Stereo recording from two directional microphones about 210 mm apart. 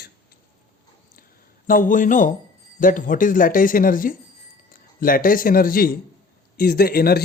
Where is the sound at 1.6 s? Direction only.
40° left (ahead or behind).